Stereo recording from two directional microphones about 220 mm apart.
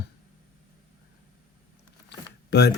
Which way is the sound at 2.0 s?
50° left (ahead or behind).